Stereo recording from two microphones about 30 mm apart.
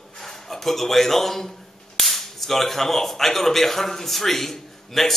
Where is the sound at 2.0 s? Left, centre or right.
Centre.